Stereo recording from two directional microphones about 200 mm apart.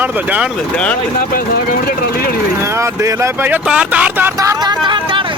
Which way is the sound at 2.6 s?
15° right (ahead or behind).